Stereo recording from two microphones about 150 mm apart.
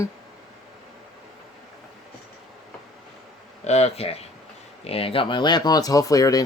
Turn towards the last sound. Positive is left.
turn(degrees=25)  # may be behind; listen again after turning